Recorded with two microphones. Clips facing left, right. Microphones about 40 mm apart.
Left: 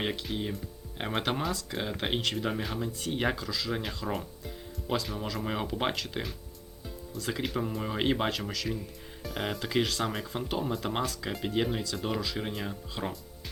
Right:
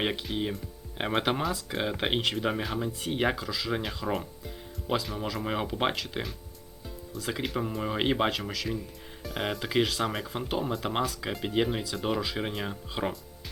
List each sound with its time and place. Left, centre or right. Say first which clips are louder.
0.3 s speech: right 2 dB; centre